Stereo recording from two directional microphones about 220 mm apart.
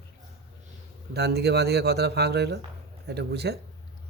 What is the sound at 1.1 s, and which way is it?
Speech, 50° right (ahead or behind).